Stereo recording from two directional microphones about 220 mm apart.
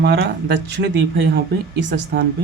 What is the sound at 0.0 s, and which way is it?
Speech, 50° right (ahead or behind).